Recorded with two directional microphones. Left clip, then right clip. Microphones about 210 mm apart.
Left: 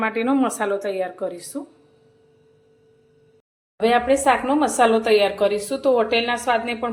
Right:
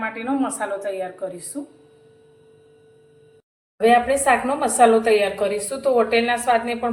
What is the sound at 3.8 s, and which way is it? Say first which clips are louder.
A woman's voice: right 1 dB; 40° left (ahead or behind).